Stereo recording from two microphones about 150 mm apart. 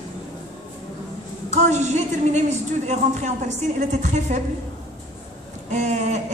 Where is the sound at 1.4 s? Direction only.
50° right (ahead or behind).